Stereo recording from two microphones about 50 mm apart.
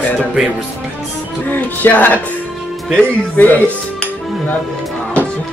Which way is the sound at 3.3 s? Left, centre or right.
Left.